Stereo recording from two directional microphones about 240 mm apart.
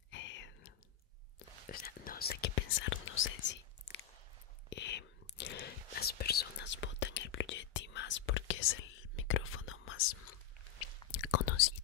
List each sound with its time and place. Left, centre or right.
0.1 s whispering: left
1.7 s whispering: left
4.6 s whispering: left
11.1 s whispering: left